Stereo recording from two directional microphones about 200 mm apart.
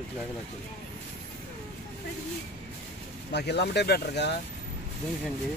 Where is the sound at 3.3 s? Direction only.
55° left (ahead or behind).